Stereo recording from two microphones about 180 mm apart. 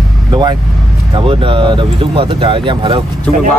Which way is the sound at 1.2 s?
30° right (ahead or behind).